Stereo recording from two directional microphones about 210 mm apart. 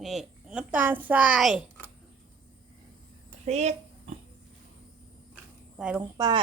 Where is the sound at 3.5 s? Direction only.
30° right (ahead or behind).